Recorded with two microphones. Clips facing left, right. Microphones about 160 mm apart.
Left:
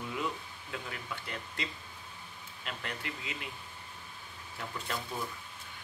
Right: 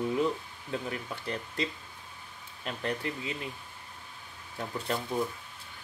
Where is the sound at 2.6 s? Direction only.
35° right (ahead or behind).